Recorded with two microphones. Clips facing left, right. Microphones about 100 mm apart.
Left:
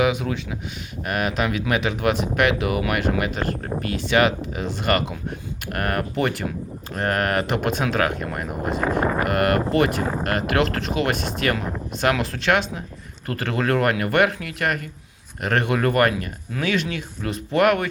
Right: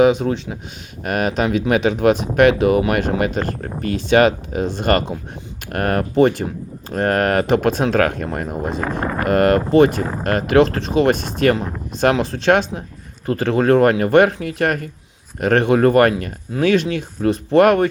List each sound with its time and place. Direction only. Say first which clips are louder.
0.0 s speech: right 7 dB; 35° right (ahead or behind)